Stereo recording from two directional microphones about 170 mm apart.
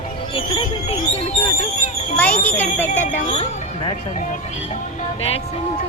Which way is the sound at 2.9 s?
45° left (ahead or behind).